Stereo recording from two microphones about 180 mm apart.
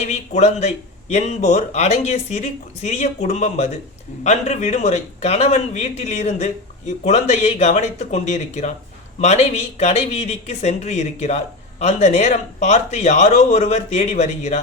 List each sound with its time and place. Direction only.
0.1 s speech: 40° left (ahead or behind)